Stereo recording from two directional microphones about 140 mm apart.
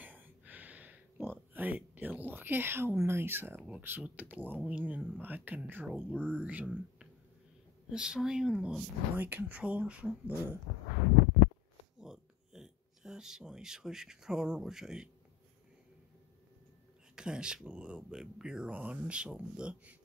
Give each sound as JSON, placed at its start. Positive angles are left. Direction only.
{"t": 0.0, "sound": "a sound", "side_deg": -10}
{"t": 3.6, "sound": "speech", "side_deg": -10}
{"t": 6.0, "sound": "speech", "side_deg": 10}
{"t": 6.4, "sound": "speech", "side_deg": -10}
{"t": 12.0, "sound": "speech", "side_deg": -5}
{"t": 17.1, "sound": "speech", "side_deg": -5}